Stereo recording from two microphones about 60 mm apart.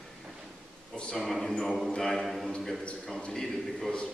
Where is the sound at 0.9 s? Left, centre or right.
Centre.